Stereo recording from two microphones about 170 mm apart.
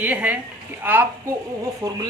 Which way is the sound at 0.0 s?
10° right (ahead or behind).